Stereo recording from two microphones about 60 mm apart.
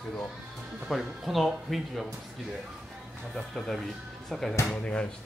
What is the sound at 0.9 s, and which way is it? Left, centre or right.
Speech, centre.